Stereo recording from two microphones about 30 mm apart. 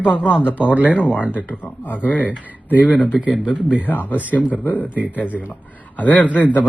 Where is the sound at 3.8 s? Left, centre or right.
Left.